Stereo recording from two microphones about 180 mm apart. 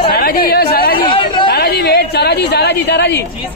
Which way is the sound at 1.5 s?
60° left (ahead or behind).